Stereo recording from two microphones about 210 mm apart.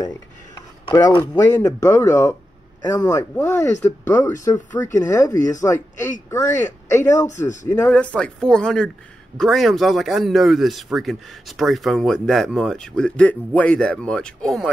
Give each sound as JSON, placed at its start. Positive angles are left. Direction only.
{"t": 1.3, "sound": "speech", "side_deg": 15}
{"t": 7.2, "sound": "speech", "side_deg": 35}
{"t": 7.6, "sound": "speech", "side_deg": 10}